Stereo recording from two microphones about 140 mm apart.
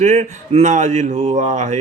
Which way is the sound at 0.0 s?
60° right (ahead or behind).